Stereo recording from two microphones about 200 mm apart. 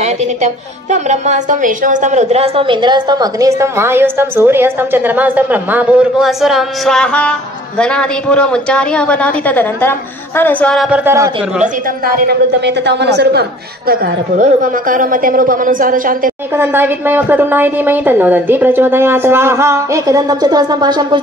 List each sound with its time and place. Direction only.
0.0 s a woman's voice: 35° right (ahead or behind); by 11.0 s centre (ahead or behind)
11.1 s a woman's voice: 15° right (ahead or behind)
12.3 s a woman's voice: 55° right (ahead or behind)
16.5 s a woman's voice: 10° right (ahead or behind)